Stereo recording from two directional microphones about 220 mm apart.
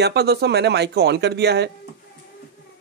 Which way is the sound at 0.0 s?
50° right (ahead or behind).